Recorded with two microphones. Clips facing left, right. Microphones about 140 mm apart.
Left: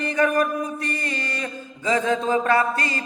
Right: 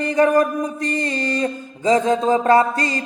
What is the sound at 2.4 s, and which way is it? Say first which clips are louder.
Music: right 5 dB; 40° right (ahead or behind).